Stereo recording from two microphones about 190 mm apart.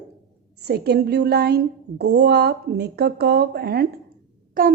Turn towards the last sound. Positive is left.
turn(degrees=-45)  # may be behind; listen again after turning